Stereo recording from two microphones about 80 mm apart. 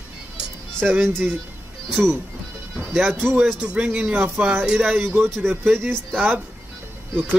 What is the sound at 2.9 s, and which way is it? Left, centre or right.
Speech, right.